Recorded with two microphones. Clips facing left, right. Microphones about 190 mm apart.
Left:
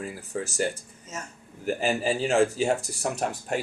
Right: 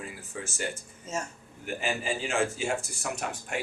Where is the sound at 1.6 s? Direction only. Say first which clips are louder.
Left 6 dB; 35° left (ahead or behind).